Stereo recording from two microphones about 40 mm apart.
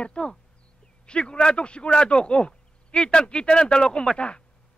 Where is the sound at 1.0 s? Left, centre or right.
Left.